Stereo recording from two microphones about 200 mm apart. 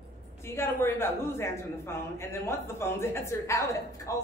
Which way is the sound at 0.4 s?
10° left (ahead or behind).